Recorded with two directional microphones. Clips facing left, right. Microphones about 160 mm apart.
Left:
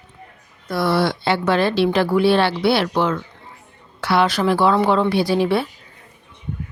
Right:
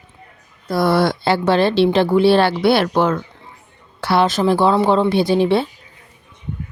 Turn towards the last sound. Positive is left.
turn(degrees=-25)  # may be behind; listen again after turning